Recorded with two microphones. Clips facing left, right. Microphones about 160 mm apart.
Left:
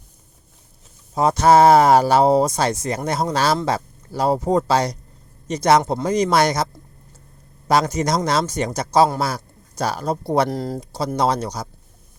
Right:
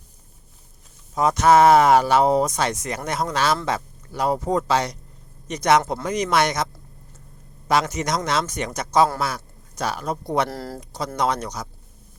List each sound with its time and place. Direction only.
1.1 s speech: 30° left (ahead or behind)
7.7 s speech: 35° left (ahead or behind)
10.5 s speech: 20° left (ahead or behind)
10.8 s speech: 30° left (ahead or behind)